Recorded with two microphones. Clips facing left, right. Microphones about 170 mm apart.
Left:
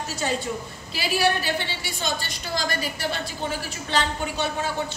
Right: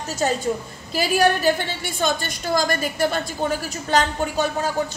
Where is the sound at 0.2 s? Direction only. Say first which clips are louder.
Right 6 dB; 45° right (ahead or behind).